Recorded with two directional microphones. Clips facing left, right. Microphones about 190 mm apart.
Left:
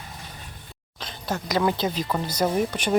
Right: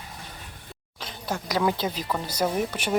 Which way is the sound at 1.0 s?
10° right (ahead or behind).